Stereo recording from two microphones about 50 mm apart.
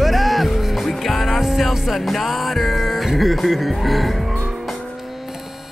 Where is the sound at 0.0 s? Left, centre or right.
Centre.